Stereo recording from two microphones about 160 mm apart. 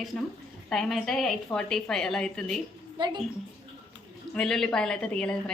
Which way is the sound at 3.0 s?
30° right (ahead or behind).